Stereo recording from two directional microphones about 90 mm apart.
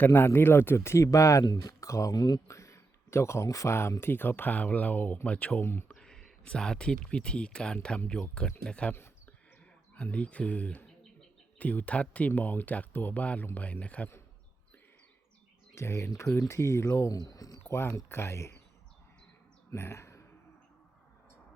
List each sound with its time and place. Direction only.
0.0 s speech: 20° left (ahead or behind); by 2.4 s 50° left (ahead or behind)
2.5 s speech: 35° left (ahead or behind); by 14.1 s 15° left (ahead or behind)
15.7 s speech: 30° left (ahead or behind)
17.2 s speech: 40° left (ahead or behind)
17.7 s speech: 25° left (ahead or behind)
19.7 s speech: 30° left (ahead or behind)